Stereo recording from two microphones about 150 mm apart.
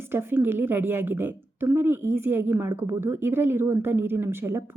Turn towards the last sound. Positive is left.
turn(degrees=-15)  # may be behind; listen again after turning